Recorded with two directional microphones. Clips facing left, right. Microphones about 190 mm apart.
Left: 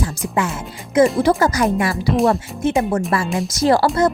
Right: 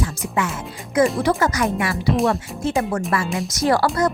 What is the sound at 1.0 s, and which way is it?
Speech, 25° left (ahead or behind).